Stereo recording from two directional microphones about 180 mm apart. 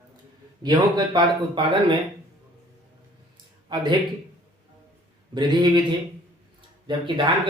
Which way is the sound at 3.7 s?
25° right (ahead or behind).